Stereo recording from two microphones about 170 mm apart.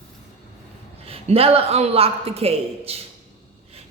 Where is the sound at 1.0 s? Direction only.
35° right (ahead or behind).